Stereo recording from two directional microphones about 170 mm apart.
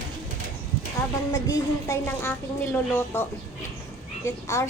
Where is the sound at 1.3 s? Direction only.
15° left (ahead or behind).